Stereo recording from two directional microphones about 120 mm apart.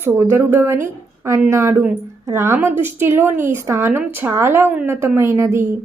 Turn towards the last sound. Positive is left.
turn(degrees=-25)  # may be behind; listen again after turning